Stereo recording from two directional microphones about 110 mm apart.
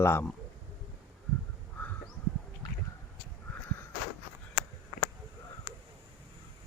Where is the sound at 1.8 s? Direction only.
15° left (ahead or behind).